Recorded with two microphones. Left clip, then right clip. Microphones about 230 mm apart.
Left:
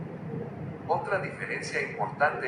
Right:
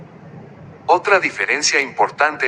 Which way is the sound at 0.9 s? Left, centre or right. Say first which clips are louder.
Right 15 dB; right.